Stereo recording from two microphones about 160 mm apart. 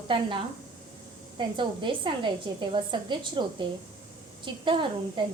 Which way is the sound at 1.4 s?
30° right (ahead or behind).